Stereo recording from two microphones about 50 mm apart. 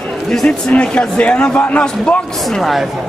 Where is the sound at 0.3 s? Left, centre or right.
Centre.